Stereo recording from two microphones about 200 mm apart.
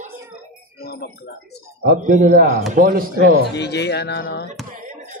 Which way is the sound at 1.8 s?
45° right (ahead or behind).